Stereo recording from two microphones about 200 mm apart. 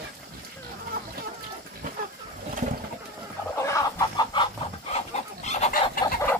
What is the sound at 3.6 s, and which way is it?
Chicken, 15° left (ahead or behind).